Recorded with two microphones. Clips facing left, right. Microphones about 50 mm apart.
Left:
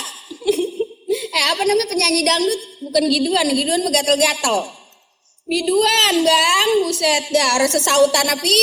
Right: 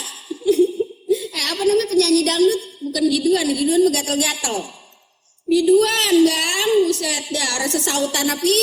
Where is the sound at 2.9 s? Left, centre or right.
Left.